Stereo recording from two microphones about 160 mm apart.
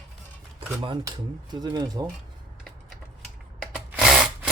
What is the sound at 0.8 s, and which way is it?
Speech, 25° right (ahead or behind).